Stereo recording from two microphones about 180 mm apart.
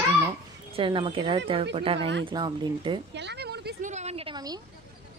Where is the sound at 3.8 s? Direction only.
40° right (ahead or behind).